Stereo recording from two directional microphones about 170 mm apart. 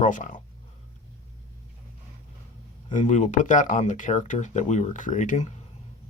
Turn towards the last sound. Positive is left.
turn(degrees=45)  # may be behind; listen again after turning